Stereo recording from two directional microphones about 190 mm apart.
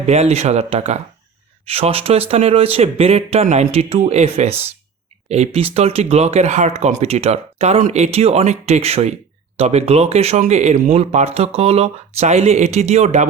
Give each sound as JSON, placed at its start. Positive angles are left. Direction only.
{"t": 0.0, "sound": "speech", "side_deg": -35}